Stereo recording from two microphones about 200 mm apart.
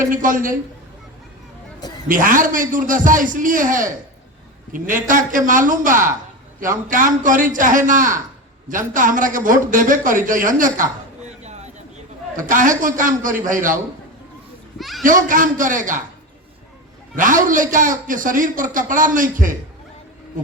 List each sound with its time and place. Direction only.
0.1 s a man's voice: 40° right (ahead or behind)
2.0 s a man's voice: 40° right (ahead or behind)
11.3 s a sound: 35° right (ahead or behind)
12.4 s a man's voice: 40° right (ahead or behind)
14.8 s children playing: centre (ahead or behind)
15.0 s a man's voice: 40° right (ahead or behind)
17.2 s a man's voice: 40° right (ahead or behind)